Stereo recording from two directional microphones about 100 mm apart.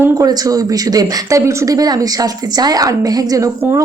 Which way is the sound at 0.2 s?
40° right (ahead or behind).